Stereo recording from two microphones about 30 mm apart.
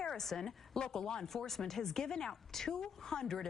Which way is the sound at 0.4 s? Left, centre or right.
Left.